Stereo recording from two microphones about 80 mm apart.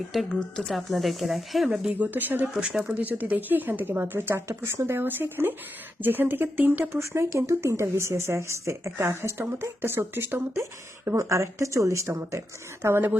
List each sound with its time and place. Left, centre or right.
0.3 s speech: centre
2.0 s speech: right
2.6 s speech: centre
7.0 s speech: right
12.8 s speech: right